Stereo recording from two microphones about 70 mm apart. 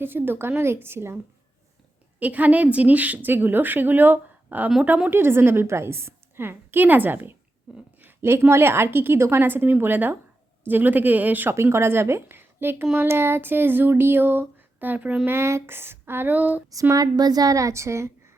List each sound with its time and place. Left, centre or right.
0.0 s a woman's voice: right
2.1 s a woman's voice: right
7.7 s speech: centre
8.0 s a woman's voice: right
11.5 s a woman's voice: right
15.3 s a woman's voice: right
16.9 s speech: right